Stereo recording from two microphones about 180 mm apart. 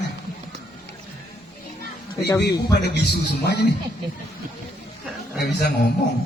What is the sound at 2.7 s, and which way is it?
Speech, 65° left (ahead or behind).